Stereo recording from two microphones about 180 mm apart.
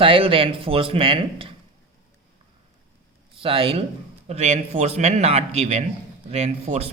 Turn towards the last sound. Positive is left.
turn(degrees=-35)  # may be behind; listen again after turning